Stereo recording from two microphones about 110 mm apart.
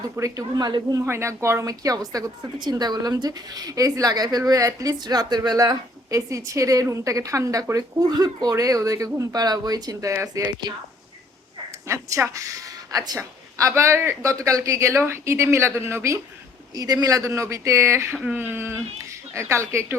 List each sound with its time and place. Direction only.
0.2 s a woman's voice: 35° right (ahead or behind)
1.0 s a woman's voice: 25° right (ahead or behind)
11.9 s speech: 25° right (ahead or behind)
16.7 s speech: 35° right (ahead or behind)
18.2 s speech: 15° right (ahead or behind)